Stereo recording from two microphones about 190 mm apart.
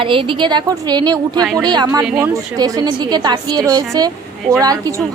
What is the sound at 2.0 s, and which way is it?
Speech, 5° right (ahead or behind).